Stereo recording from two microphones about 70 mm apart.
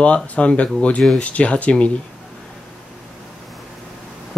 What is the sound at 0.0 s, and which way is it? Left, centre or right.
Speech, centre.